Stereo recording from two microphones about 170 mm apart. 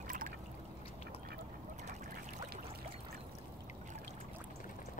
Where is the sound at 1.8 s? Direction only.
45° right (ahead or behind).